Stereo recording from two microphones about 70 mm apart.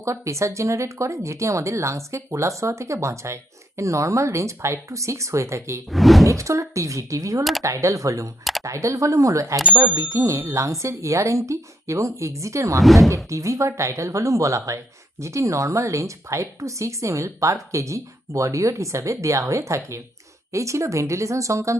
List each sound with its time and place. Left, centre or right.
0.0 s speech: right
5.9 s speech: centre
6.2 s speech: right
12.8 s speech: centre
13.3 s speech: right